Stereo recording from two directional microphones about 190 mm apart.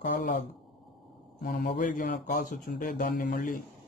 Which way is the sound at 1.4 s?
45° left (ahead or behind).